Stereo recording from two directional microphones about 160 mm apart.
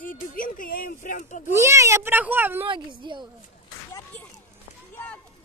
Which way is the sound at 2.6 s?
30° right (ahead or behind).